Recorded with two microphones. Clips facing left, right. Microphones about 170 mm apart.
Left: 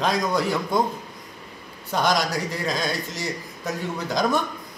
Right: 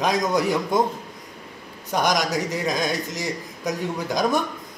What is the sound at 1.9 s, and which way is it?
A man's voice, 15° right (ahead or behind).